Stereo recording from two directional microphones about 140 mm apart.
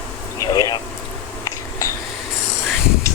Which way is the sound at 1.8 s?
25° left (ahead or behind).